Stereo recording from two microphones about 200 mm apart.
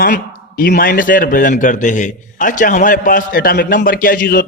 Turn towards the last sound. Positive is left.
turn(degrees=45)  # may be behind; listen again after turning